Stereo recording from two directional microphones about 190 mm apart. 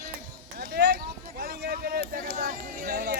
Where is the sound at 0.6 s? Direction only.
55° right (ahead or behind).